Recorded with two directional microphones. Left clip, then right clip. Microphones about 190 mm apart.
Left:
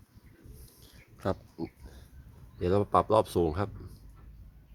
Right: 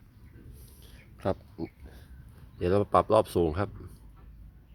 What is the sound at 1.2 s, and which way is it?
Pig, centre (ahead or behind).